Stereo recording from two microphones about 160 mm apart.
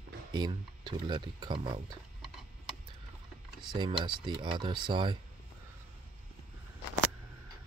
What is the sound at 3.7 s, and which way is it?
Speech, 30° right (ahead or behind).